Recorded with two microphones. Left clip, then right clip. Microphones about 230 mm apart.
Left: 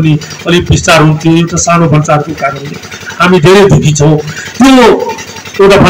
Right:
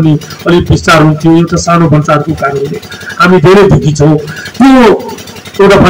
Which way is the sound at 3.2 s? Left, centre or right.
Right.